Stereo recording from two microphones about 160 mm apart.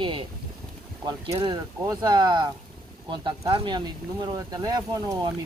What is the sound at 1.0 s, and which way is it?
Speech, 30° right (ahead or behind).